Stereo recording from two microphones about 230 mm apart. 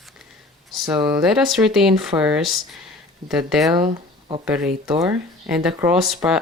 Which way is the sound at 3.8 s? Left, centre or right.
Centre.